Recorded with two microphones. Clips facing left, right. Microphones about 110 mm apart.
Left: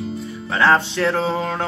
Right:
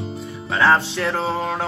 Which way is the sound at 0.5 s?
Centre (ahead or behind).